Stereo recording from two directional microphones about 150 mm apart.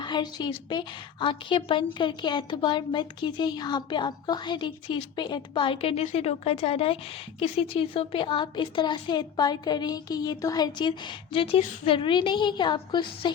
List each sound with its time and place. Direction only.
0.0 s a woman's voice: 30° left (ahead or behind)